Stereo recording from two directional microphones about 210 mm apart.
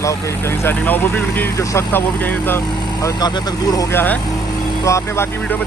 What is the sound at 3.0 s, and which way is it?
Speech, 20° left (ahead or behind).